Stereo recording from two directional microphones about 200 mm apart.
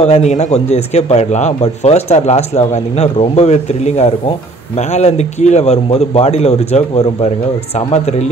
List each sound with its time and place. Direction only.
0.0 s a man's voice: 35° left (ahead or behind)